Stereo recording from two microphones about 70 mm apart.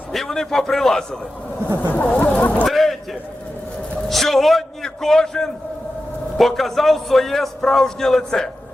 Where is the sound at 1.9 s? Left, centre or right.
Left.